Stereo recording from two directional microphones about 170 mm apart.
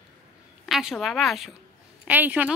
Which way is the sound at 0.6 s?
Centre (ahead or behind).